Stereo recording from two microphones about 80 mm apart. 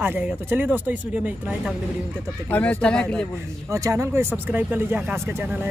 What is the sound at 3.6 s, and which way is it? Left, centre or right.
Speech, right.